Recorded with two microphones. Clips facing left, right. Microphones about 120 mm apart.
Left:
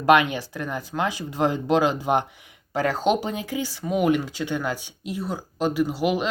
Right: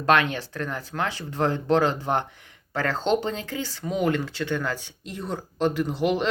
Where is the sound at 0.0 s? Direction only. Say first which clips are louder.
Left 3 dB; 15° left (ahead or behind).